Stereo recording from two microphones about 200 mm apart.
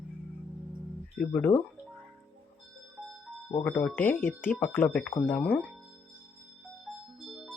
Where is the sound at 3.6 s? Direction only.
5° left (ahead or behind).